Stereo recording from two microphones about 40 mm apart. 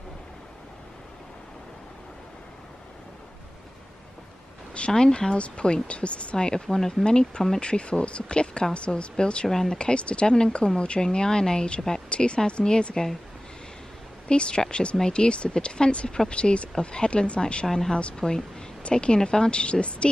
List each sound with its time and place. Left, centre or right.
4.7 s speech: left
6.3 s speech: centre
9.5 s speech: centre
9.8 s speech: left
14.2 s speech: left
17.6 s speech: centre
17.9 s speech: left